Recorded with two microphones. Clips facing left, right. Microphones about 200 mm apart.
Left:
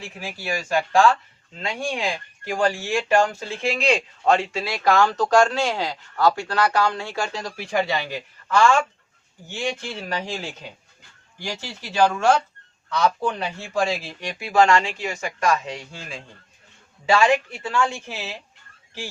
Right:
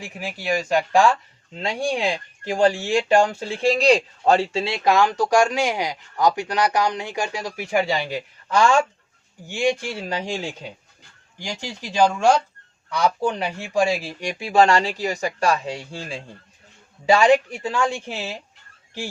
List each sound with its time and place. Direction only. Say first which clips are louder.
0.0 s speech: right 3 dB; 15° right (ahead or behind)
1.5 s speech: right 4 dB; 35° right (ahead or behind)
2.9 s speech: left 1 dB; 15° right (ahead or behind)
3.2 s speech: right 5 dB; 35° right (ahead or behind); by 10.0 s 15° right (ahead or behind)
10.1 s speech: right 2 dB; 30° right (ahead or behind)
11.3 s speech: right 1 dB; 15° right (ahead or behind)
14.4 s speech: right 1 dB; 30° right (ahead or behind)
17.1 s speech: right 3 dB; 20° right (ahead or behind)